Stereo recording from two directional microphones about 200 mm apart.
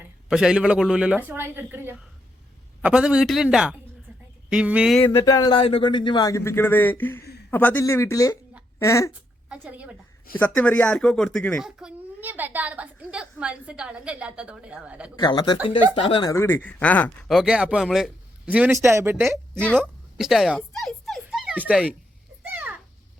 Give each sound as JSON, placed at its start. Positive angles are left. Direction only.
{"t": 0.0, "sound": "speech", "side_deg": -5}
{"t": 4.9, "sound": "speech", "side_deg": 15}
{"t": 9.5, "sound": "a woman's voice", "side_deg": -5}
{"t": 10.3, "sound": "speech", "side_deg": 10}
{"t": 15.1, "sound": "speech", "side_deg": 20}
{"t": 16.3, "sound": "speech", "side_deg": 10}
{"t": 19.8, "sound": "a sound", "side_deg": 0}